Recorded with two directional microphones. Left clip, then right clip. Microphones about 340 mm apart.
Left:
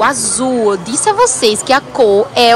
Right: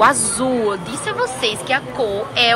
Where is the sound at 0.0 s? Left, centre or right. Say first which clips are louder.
Left 1 dB; centre.